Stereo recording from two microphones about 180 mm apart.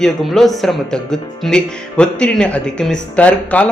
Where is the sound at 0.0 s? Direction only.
Centre (ahead or behind).